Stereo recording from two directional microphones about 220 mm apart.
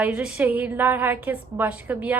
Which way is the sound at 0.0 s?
5° right (ahead or behind).